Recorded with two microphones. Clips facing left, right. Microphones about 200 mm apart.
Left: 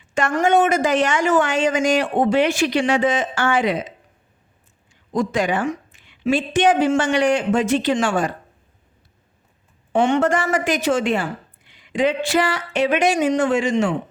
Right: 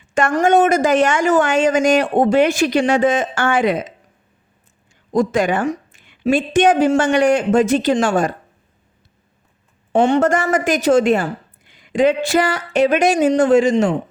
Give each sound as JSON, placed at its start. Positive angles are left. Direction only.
{"t": 0.1, "sound": "a woman's voice", "side_deg": -45}
{"t": 5.1, "sound": "a woman's voice", "side_deg": -45}
{"t": 9.9, "sound": "a woman's voice", "side_deg": -40}